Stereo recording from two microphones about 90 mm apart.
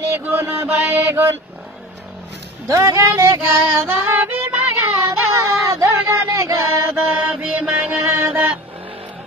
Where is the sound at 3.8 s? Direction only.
20° right (ahead or behind).